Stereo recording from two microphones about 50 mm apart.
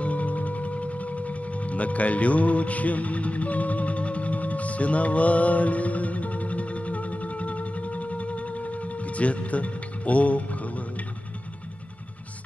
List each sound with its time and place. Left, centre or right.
0.0 s music: left